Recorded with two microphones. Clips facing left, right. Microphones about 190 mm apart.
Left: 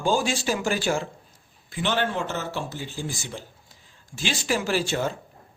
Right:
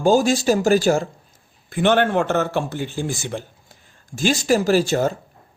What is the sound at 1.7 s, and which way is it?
Speech, 55° right (ahead or behind).